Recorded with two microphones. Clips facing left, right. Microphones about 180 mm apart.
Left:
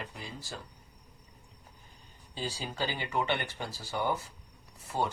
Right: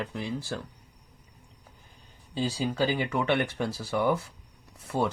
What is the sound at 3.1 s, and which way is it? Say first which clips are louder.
Speech: right 5 dB; 90° right.